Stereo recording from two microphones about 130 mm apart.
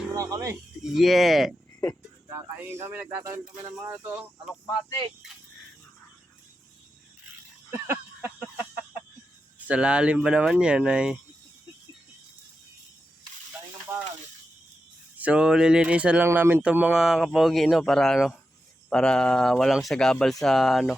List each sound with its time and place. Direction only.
0.2 s speech: 25° right (ahead or behind)
0.9 s speech: centre (ahead or behind)
2.3 s speech: 15° right (ahead or behind)
7.7 s a sound: 20° right (ahead or behind)
9.6 s speech: 10° right (ahead or behind)
13.9 s speech: 15° right (ahead or behind)
15.2 s speech: 10° right (ahead or behind)